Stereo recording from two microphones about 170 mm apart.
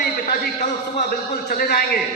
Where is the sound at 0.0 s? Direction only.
65° left (ahead or behind).